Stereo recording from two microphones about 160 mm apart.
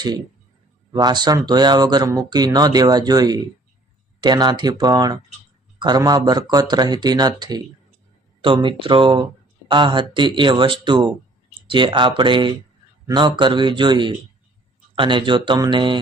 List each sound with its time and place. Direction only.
0.9 s speech: 25° right (ahead or behind)
8.6 s speech: 30° right (ahead or behind)